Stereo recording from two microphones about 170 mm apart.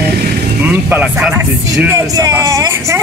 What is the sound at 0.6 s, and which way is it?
Speech, 10° right (ahead or behind).